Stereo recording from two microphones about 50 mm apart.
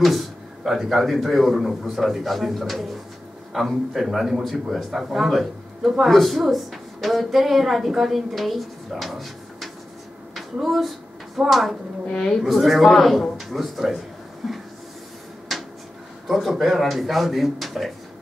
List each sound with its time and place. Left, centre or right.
0.0 s a man's voice: centre
10.3 s a sound: centre
12.1 s a woman's voice: centre
12.4 s a man's voice: centre
14.4 s a sound: centre
15.5 s drawer open or close: centre
16.3 s a man's voice: centre